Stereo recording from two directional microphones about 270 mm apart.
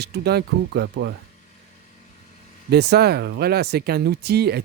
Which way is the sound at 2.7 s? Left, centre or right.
Right.